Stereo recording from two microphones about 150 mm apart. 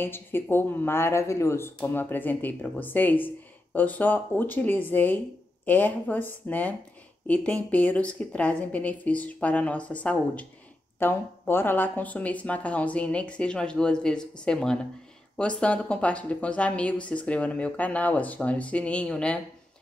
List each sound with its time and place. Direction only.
0.0 s speech: 15° left (ahead or behind)